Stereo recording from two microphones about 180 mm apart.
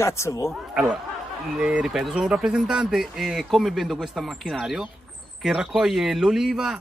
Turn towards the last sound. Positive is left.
turn(degrees=0)  # may be behind; listen again after turning